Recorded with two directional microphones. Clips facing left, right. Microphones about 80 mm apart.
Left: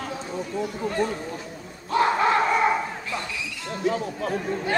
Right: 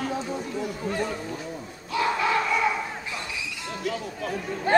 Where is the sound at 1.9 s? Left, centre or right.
Left.